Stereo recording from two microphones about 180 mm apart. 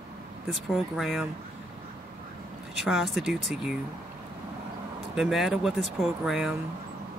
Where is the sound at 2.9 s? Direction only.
Centre (ahead or behind).